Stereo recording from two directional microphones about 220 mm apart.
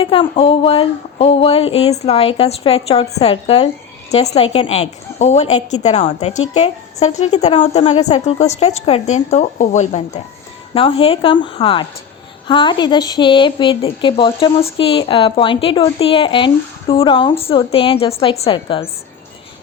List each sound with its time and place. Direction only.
0.0 s a woman's voice: 25° left (ahead or behind)